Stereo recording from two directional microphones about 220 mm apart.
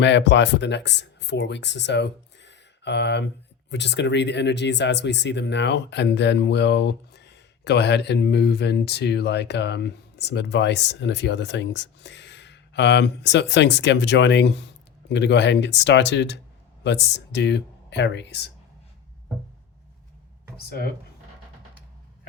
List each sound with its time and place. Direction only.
0.0 s speech: 55° left (ahead or behind)